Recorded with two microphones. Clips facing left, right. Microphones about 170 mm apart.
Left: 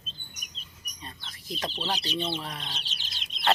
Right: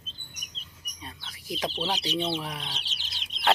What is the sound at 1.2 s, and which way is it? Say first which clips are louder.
Speech: right 3 dB; 10° right (ahead or behind).